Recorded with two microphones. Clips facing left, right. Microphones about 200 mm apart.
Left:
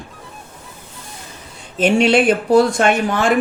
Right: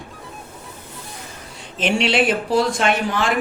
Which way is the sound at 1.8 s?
45° left (ahead or behind).